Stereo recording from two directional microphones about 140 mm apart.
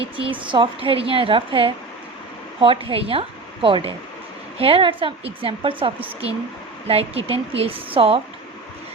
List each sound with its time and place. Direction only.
0.0 s a woman's voice: 40° right (ahead or behind)